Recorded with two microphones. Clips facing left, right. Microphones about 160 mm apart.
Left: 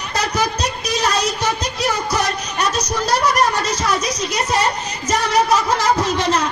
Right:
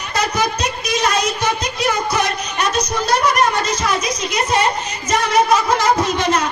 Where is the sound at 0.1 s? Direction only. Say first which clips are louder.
Right 1 dB; 35° left (ahead or behind).